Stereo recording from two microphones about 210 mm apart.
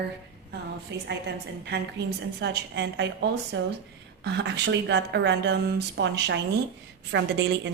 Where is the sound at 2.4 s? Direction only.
55° right (ahead or behind).